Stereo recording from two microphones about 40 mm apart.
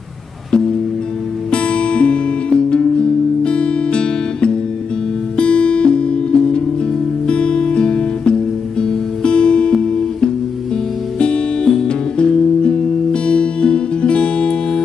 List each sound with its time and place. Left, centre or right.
1.5 s music: left
11.1 s music: left